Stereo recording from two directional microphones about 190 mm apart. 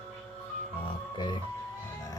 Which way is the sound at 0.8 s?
25° left (ahead or behind).